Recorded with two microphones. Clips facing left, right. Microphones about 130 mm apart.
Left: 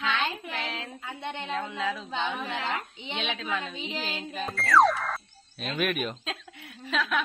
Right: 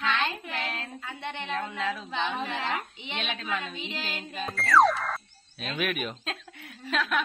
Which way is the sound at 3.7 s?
15° left (ahead or behind).